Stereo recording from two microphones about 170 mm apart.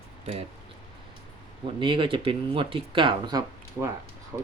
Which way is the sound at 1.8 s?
30° right (ahead or behind).